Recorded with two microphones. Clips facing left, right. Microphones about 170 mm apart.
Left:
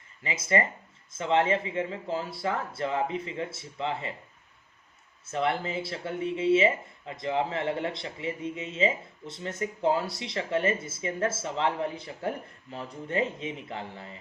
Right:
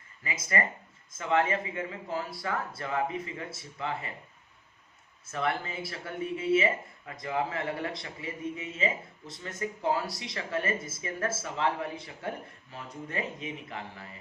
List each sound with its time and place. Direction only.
0.2 s speech: 25° left (ahead or behind)
5.3 s speech: 25° left (ahead or behind)